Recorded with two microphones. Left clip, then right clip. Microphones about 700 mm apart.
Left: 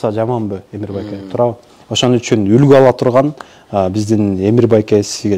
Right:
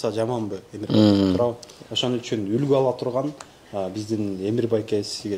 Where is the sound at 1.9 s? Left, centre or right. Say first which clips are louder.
Left 11 dB; left.